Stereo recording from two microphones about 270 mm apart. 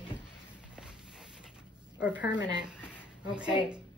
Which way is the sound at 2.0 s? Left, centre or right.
Centre.